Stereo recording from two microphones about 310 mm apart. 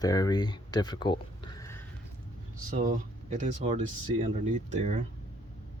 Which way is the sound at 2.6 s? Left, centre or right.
Right.